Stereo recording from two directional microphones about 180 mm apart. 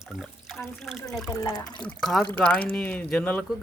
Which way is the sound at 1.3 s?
20° left (ahead or behind).